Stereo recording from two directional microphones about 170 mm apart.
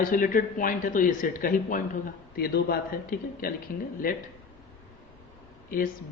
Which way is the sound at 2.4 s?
65° left (ahead or behind).